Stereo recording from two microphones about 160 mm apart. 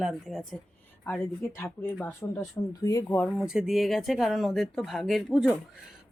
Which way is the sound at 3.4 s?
5° right (ahead or behind).